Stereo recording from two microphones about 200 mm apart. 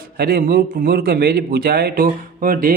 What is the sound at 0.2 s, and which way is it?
A man's voice, 50° right (ahead or behind).